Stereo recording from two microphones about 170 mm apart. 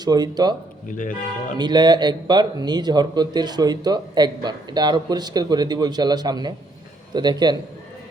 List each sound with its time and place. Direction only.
0.0 s a man's voice: 25° right (ahead or behind)
0.9 s speech: 50° left (ahead or behind)
1.5 s a man's voice: 25° right (ahead or behind)